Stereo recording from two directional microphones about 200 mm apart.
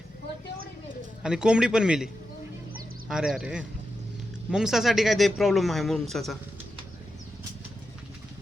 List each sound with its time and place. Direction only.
1.2 s speech: 5° right (ahead or behind)
3.1 s speech: centre (ahead or behind)